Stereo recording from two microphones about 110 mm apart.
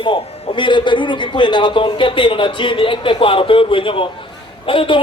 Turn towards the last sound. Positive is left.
turn(degrees=50)  # may be behind; listen again after turning